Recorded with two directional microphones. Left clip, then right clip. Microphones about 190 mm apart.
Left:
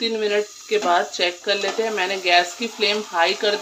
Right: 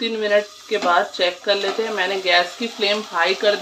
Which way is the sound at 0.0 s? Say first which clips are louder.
Right 2 dB; 15° left (ahead or behind).